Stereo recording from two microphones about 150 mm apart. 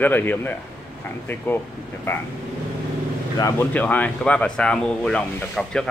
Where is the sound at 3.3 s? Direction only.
20° left (ahead or behind).